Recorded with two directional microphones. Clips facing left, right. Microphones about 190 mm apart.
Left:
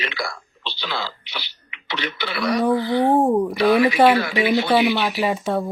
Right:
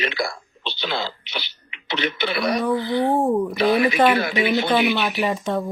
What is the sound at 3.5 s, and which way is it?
Speech, 20° right (ahead or behind).